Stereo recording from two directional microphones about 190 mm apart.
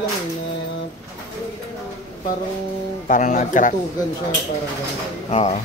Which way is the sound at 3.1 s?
45° left (ahead or behind).